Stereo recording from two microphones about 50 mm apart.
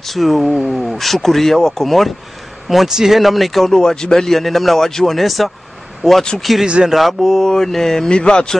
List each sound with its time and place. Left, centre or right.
0.0 s a man's voice: centre
7.0 s speech: centre